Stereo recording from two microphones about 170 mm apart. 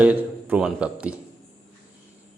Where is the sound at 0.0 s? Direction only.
10° right (ahead or behind).